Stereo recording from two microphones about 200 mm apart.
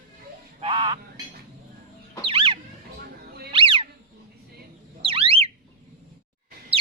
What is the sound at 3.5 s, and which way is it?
Squeak, 25° right (ahead or behind).